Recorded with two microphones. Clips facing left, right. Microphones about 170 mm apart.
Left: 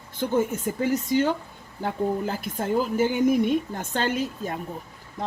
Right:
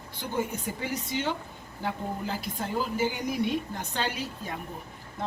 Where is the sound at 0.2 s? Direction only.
45° left (ahead or behind).